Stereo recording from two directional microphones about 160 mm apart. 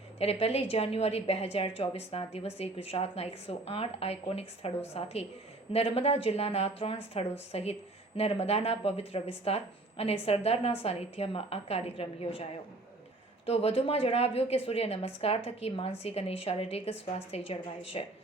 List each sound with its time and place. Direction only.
0.2 s speech: 40° left (ahead or behind)